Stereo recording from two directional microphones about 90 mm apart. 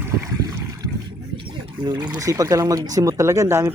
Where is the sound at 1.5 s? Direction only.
55° right (ahead or behind).